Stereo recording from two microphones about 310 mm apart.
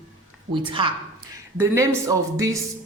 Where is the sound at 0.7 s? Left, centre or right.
Centre.